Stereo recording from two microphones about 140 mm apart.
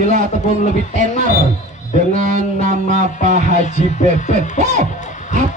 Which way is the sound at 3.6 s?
60° left (ahead or behind).